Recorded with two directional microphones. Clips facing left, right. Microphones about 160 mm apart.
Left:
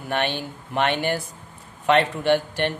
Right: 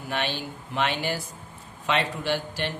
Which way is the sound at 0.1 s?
55° left (ahead or behind).